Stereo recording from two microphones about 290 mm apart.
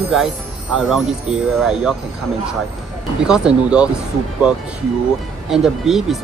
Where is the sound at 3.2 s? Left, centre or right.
Centre.